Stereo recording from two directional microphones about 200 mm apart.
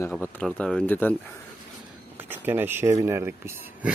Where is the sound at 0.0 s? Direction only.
10° left (ahead or behind).